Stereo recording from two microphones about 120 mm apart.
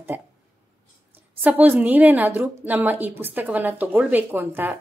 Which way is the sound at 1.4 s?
15° right (ahead or behind).